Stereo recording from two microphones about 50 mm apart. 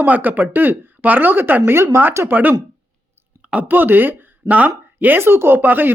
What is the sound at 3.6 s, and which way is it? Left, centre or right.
Speech, right.